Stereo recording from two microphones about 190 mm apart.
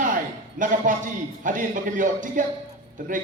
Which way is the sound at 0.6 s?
45° right (ahead or behind).